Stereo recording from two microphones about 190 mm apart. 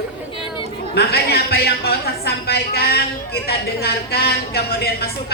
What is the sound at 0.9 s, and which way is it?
A woman's voice, 55° left (ahead or behind).